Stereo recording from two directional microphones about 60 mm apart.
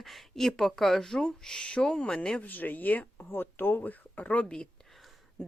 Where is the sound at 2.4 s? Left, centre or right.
Left.